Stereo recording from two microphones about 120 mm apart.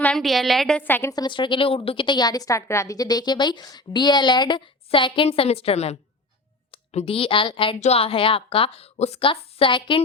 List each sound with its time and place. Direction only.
0.0 s a woman's voice: 5° left (ahead or behind)
0.8 s a woman's voice: 15° left (ahead or behind)
1.1 s a woman's voice: 40° left (ahead or behind); by 6.0 s 60° left (ahead or behind)
6.7 s a woman's voice: 50° left (ahead or behind)
7.8 s a woman's voice: 60° left (ahead or behind)